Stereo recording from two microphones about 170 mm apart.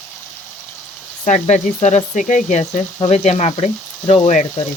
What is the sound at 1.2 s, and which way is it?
Speech, 45° left (ahead or behind).